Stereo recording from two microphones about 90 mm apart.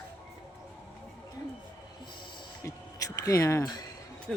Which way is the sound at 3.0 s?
40° left (ahead or behind).